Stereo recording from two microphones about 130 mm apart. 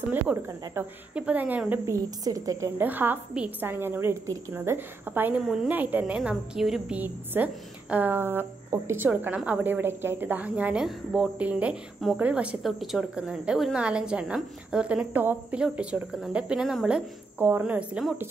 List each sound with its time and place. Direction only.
0.1 s a woman's voice: 15° right (ahead or behind)
1.9 s a woman's voice: 25° right (ahead or behind)
2.8 s a woman's voice: 15° right (ahead or behind)
5.4 s a woman's voice: centre (ahead or behind)
5.7 s a woman's voice: 15° right (ahead or behind)